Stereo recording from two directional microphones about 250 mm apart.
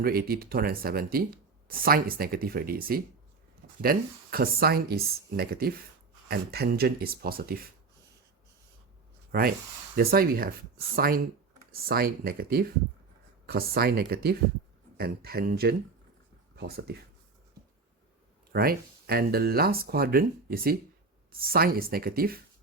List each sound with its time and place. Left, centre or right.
0.0 s speech: right
9.3 s speech: right
18.5 s speech: right